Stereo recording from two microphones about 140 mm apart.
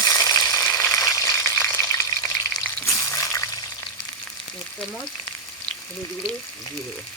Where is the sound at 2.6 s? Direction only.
15° left (ahead or behind).